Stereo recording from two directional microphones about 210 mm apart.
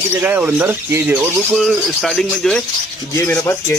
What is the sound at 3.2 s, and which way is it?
Rub, 15° left (ahead or behind).